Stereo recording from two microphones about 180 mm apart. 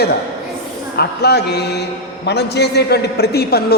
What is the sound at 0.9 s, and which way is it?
A man's voice, 65° left (ahead or behind).